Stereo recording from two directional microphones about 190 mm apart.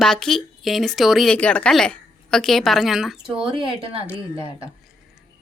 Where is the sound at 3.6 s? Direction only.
25° right (ahead or behind).